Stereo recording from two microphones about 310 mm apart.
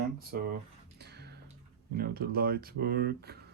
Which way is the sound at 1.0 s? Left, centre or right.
Right.